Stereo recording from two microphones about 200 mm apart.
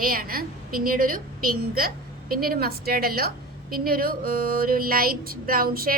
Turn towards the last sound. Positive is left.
turn(degrees=-45)  # may be behind; listen again after turning